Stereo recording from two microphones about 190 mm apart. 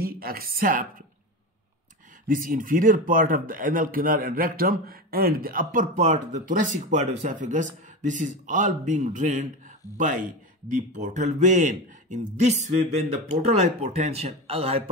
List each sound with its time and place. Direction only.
0.0 s a woman's voice: 50° right (ahead or behind)
2.2 s a man's voice: 45° right (ahead or behind); by 14.9 s 30° right (ahead or behind)